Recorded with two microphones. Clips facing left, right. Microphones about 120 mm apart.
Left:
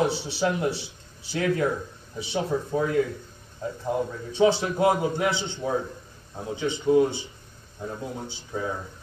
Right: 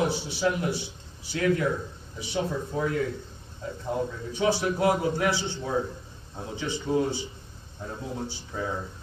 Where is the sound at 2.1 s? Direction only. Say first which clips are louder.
Left 3 dB; 25° left (ahead or behind).